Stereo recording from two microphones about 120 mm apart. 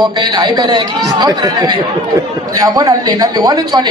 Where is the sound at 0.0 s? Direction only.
35° right (ahead or behind).